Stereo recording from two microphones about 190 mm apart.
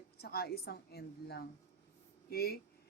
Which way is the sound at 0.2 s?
55° left (ahead or behind).